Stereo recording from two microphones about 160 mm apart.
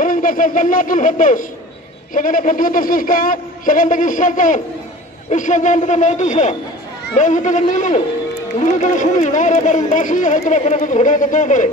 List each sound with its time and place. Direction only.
0.0 s a woman's voice: 60° left (ahead or behind)